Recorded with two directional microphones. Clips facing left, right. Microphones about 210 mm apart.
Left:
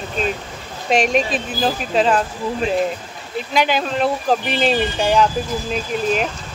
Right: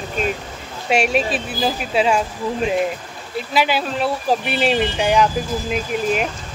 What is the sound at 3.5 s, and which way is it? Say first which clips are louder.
Speech: left 1 dB; 5° right (ahead or behind).